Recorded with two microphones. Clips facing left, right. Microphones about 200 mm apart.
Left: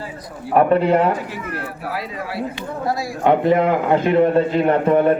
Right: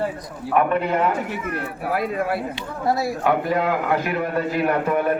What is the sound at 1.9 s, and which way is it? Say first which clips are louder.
Speech: right 7 dB; 55° right (ahead or behind).